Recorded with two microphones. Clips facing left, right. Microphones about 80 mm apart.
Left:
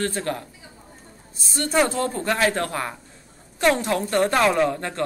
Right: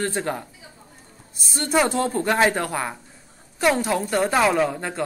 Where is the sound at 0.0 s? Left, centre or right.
Centre.